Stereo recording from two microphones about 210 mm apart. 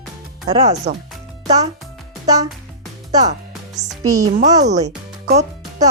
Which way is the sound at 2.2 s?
15° right (ahead or behind).